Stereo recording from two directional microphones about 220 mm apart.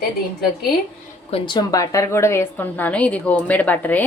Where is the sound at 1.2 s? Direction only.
25° left (ahead or behind).